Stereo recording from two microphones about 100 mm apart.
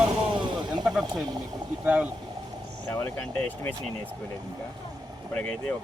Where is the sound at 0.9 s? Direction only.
5° right (ahead or behind).